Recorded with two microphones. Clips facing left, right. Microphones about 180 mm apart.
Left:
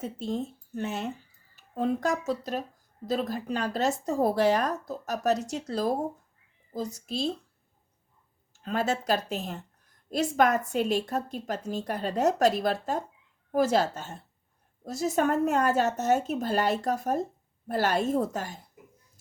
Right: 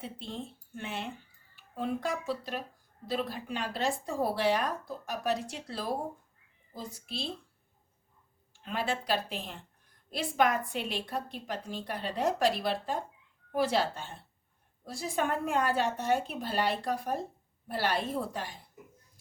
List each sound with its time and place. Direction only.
0.0 s speech: 40° left (ahead or behind)
8.5 s speech: 45° left (ahead or behind)